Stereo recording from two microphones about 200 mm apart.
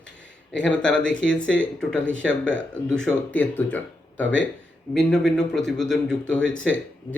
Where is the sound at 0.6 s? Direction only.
5° left (ahead or behind).